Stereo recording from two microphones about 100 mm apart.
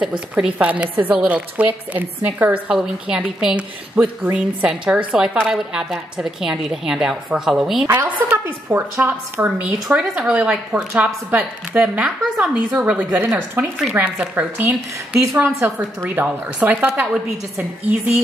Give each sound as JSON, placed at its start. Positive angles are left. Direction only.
{"t": 0.3, "sound": "a woman's voice", "side_deg": -15}
{"t": 3.3, "sound": "a woman's voice", "side_deg": -5}
{"t": 7.8, "sound": "a woman's voice", "side_deg": -20}